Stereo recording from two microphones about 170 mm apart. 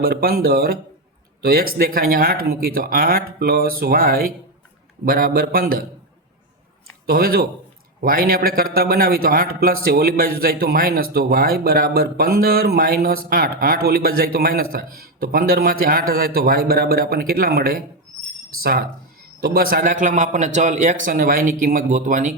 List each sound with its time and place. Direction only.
0.0 s a man's voice: 60° right (ahead or behind)
7.1 s a man's voice: 60° right (ahead or behind)